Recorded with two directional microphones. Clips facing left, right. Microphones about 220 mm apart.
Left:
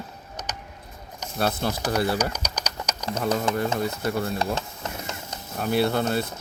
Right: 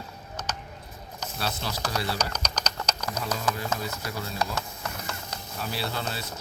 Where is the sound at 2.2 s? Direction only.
10° left (ahead or behind).